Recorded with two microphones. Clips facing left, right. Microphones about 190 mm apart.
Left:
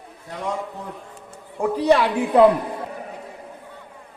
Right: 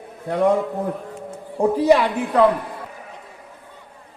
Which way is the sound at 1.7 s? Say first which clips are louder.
Right 2 dB; 15° right (ahead or behind).